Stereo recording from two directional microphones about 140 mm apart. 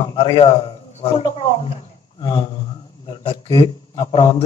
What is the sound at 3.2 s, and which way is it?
A man's voice, 40° left (ahead or behind).